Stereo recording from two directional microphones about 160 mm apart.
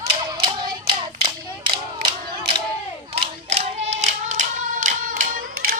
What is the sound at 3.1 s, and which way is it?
Clapping, 40° right (ahead or behind).